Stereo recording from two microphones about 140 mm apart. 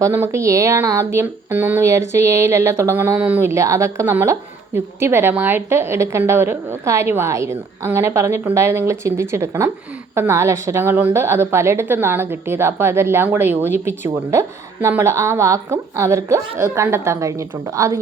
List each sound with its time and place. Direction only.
0.0 s speech: 20° right (ahead or behind)